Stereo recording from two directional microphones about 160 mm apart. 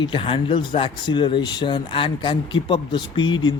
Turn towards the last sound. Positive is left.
turn(degrees=30)  # may be behind; listen again after turning